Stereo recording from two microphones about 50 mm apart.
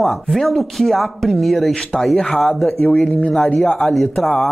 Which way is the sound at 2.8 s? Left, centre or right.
Left.